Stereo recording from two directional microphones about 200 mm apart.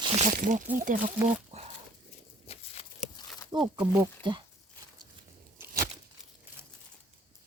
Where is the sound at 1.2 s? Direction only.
30° right (ahead or behind).